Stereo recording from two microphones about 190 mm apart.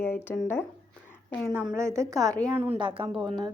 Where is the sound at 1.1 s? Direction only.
10° left (ahead or behind).